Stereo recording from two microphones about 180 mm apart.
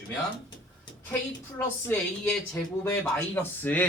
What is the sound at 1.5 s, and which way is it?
Speech, 10° left (ahead or behind).